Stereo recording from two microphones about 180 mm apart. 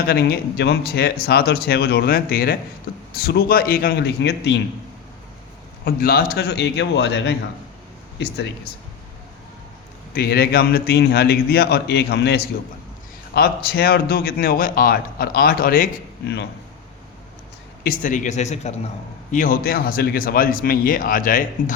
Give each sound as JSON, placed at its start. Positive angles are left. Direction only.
{"t": 0.1, "sound": "a man's voice", "side_deg": 60}
{"t": 5.8, "sound": "a man's voice", "side_deg": 55}
{"t": 10.2, "sound": "a man's voice", "side_deg": 60}
{"t": 18.0, "sound": "speech", "side_deg": 45}